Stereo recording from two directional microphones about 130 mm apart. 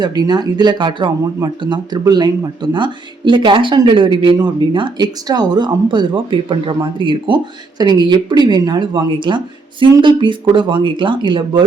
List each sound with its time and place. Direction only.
0.0 s speech: 35° right (ahead or behind)